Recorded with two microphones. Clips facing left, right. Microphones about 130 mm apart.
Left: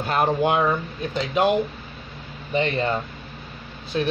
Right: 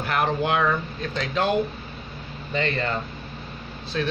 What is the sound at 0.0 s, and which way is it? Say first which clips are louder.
Speech: left 3 dB; 25° left (ahead or behind).